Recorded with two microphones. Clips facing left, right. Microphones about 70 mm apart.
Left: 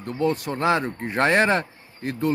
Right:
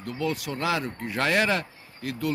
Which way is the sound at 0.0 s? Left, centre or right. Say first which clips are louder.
Left 5 dB; left.